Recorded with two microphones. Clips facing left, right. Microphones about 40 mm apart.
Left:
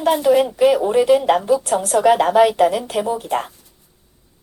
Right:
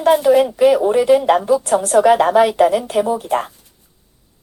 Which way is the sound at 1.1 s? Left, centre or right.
Centre.